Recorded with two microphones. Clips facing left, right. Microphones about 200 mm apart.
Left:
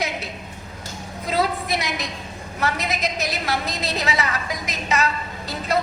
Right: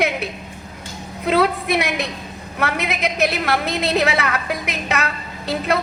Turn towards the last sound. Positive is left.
turn(degrees=-60)  # may be behind; listen again after turning